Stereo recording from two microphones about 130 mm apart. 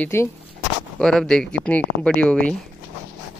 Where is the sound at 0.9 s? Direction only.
5° left (ahead or behind).